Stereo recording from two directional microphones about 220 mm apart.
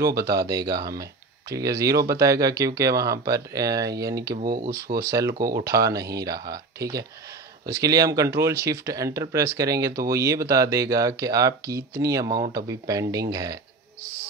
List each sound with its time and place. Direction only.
0.0 s speech: 15° right (ahead or behind)
4.4 s speech: 40° right (ahead or behind)
5.0 s speech: 15° right (ahead or behind)
5.3 s speech: 40° right (ahead or behind)
5.6 s speech: 15° right (ahead or behind)